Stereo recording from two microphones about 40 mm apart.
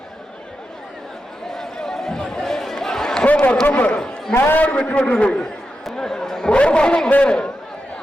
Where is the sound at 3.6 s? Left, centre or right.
Left.